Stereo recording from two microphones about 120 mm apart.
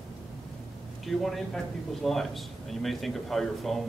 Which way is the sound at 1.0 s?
Centre (ahead or behind).